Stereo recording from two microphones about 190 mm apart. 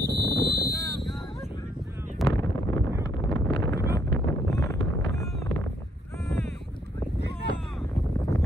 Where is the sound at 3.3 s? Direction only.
15° left (ahead or behind).